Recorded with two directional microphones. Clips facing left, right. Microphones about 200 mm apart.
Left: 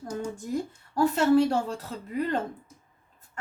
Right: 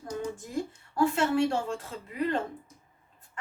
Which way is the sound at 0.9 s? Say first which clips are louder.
Left 4 dB; 40° left (ahead or behind).